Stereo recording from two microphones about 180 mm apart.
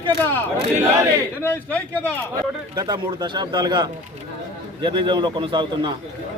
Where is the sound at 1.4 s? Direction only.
10° left (ahead or behind).